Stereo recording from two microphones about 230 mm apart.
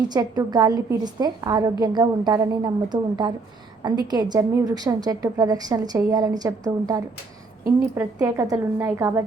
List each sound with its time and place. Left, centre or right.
0.1 s a woman's voice: centre